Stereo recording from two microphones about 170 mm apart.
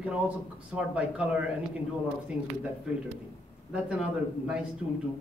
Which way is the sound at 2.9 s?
5° right (ahead or behind).